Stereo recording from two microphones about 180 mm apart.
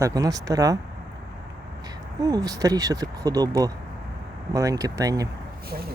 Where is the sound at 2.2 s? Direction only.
20° right (ahead or behind).